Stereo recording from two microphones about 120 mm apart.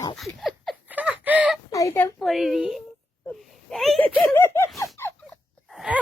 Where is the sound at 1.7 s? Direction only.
25° left (ahead or behind).